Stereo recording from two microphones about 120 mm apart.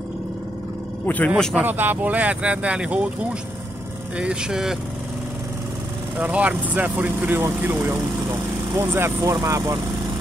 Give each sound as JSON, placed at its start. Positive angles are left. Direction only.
{"t": 1.0, "sound": "speech", "side_deg": 15}
{"t": 1.3, "sound": "speech", "side_deg": -5}
{"t": 4.2, "sound": "speech", "side_deg": -5}
{"t": 6.1, "sound": "speech", "side_deg": -10}